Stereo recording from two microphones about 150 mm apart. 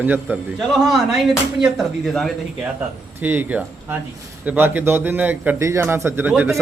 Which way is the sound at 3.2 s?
10° right (ahead or behind).